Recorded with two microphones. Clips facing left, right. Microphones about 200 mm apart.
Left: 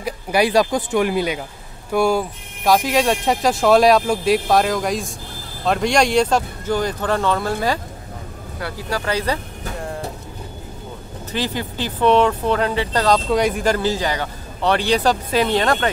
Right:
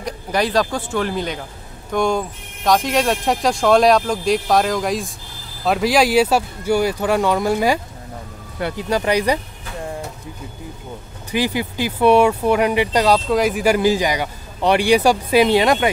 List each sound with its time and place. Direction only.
0.0 s speech: 10° left (ahead or behind); by 9.4 s 15° right (ahead or behind)
11.3 s speech: 10° right (ahead or behind)